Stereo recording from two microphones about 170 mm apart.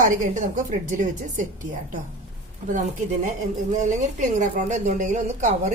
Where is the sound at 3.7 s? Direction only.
45° right (ahead or behind).